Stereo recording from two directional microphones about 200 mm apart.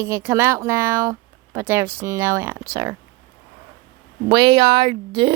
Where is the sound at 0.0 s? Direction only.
15° right (ahead or behind).